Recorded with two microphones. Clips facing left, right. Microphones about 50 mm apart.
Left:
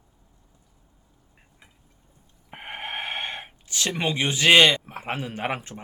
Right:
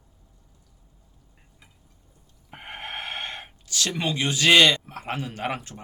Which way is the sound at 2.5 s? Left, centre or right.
Left.